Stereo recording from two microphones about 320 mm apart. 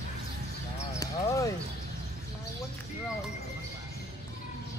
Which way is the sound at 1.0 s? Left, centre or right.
Centre.